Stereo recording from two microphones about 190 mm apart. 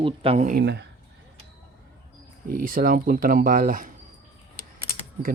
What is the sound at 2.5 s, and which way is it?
Speech, 50° right (ahead or behind).